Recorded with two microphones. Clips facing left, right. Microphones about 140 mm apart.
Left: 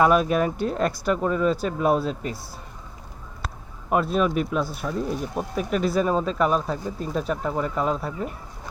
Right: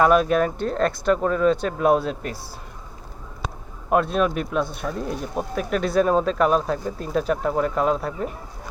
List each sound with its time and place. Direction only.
0.0 s speech: 5° left (ahead or behind)
3.4 s speech: centre (ahead or behind)